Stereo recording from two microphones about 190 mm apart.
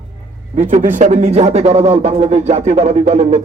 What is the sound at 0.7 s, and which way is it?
Speech, 40° right (ahead or behind).